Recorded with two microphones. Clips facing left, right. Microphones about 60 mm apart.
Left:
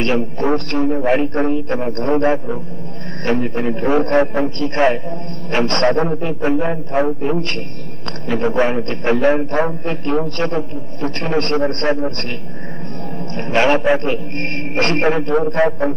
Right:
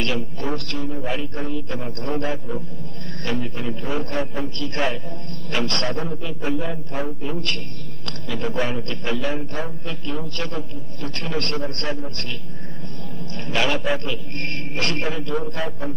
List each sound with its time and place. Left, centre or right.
0.0 s a man's voice: left
13.3 s a man's voice: left